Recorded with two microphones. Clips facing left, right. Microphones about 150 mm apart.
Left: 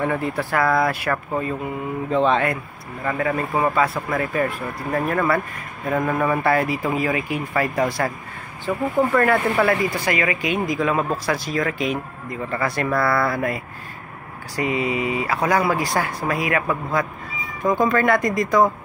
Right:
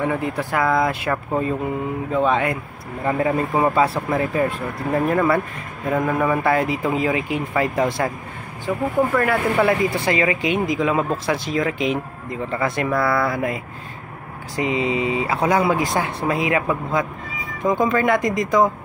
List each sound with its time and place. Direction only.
0.0 s speech: 15° right (ahead or behind)
6.0 s speech: 5° right (ahead or behind)
6.5 s speech: 20° right (ahead or behind)
8.6 s speech: 5° right (ahead or behind)
9.9 s speech: 25° right (ahead or behind)